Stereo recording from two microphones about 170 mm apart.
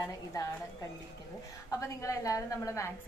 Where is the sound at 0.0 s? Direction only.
20° left (ahead or behind).